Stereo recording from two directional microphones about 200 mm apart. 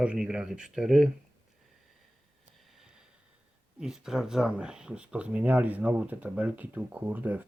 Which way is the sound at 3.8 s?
5° right (ahead or behind).